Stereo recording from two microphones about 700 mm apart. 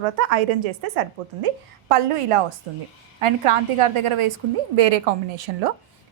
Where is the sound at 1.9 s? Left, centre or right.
Right.